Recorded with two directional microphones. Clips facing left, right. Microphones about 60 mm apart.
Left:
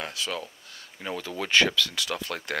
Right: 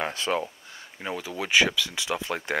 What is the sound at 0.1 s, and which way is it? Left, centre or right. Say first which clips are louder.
Speech: right 5 dB; right.